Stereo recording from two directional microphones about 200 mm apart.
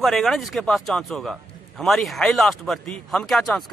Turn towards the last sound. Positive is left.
turn(degrees=0)  # may be behind; listen again after turning